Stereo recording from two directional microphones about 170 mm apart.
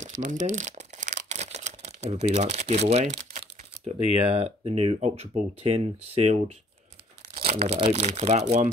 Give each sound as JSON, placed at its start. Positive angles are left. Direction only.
{"t": 0.0, "sound": "crumpling", "side_deg": -50}
{"t": 3.3, "sound": "typing", "side_deg": -55}
{"t": 3.8, "sound": "speech", "side_deg": -35}
{"t": 7.5, "sound": "speech", "side_deg": -40}